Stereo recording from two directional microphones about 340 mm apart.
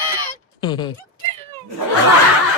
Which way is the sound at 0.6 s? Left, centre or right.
Centre.